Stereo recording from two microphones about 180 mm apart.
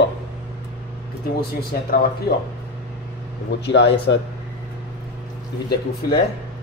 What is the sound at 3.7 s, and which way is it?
Speech, 75° left (ahead or behind).